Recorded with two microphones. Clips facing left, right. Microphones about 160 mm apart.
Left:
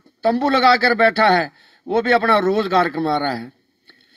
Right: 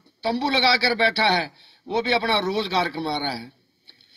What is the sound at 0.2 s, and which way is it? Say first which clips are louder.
A man's voice: left 7 dB; 50° left (ahead or behind).